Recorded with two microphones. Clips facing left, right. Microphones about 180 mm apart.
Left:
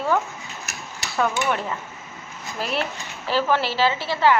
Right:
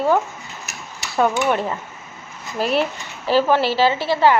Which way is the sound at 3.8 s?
35° right (ahead or behind).